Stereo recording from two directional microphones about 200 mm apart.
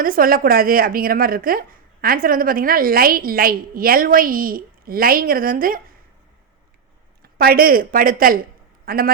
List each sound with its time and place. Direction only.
0.0 s speech: 45° right (ahead or behind)
7.2 s a woman's voice: 50° right (ahead or behind)